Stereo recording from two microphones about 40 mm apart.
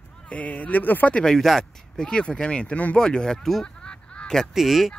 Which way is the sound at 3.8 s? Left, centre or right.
Centre.